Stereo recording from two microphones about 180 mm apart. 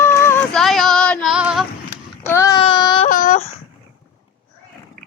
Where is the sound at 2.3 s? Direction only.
15° left (ahead or behind).